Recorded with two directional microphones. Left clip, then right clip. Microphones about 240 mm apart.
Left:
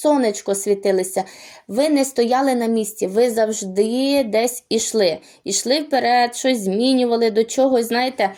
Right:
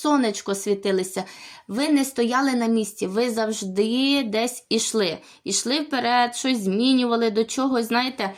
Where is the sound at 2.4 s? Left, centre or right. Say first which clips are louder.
Left 4 dB; centre.